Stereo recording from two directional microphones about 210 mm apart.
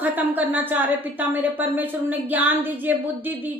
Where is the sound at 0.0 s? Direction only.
10° right (ahead or behind).